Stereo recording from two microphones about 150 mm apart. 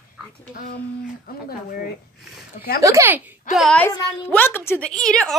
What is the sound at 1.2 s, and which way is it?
Speech, 85° left.